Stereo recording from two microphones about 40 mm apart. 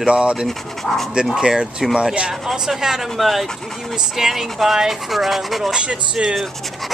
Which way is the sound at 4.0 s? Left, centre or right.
Centre.